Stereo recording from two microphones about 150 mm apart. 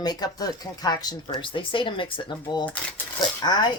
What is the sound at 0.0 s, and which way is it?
Speech, 25° left (ahead or behind).